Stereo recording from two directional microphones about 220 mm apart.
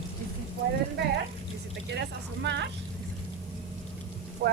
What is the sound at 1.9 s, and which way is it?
Speech, 50° right (ahead or behind).